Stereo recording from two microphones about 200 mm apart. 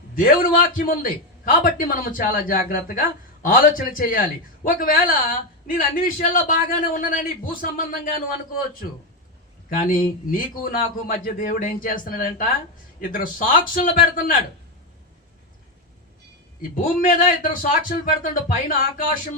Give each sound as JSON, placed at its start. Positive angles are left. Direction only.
{"t": 0.2, "sound": "a man's voice", "side_deg": 45}
{"t": 9.6, "sound": "a man's voice", "side_deg": 45}
{"t": 16.8, "sound": "a man's voice", "side_deg": 45}